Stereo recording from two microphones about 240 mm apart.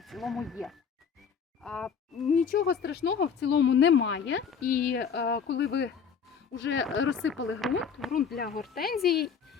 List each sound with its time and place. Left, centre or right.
0.0 s speech: centre
2.4 s a woman's voice: left
4.6 s a woman's voice: left
7.6 s speech: centre
8.4 s speech: left